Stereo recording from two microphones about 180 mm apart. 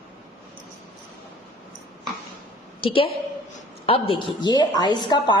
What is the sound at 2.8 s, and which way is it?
A woman's voice, 30° left (ahead or behind).